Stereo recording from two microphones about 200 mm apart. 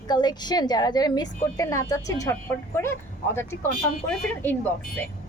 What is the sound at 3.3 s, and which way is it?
Speech, 15° left (ahead or behind).